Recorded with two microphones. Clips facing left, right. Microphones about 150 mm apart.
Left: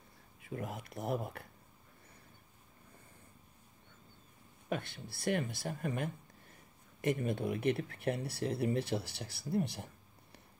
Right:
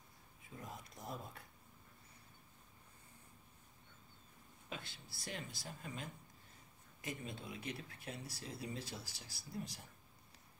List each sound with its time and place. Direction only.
0.4 s speech: 75° left (ahead or behind)
4.6 s speech: 60° left (ahead or behind)